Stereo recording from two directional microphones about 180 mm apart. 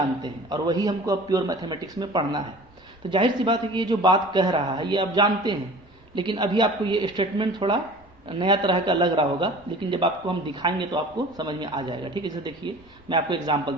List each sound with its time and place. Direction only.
0.2 s a man's voice: 20° right (ahead or behind)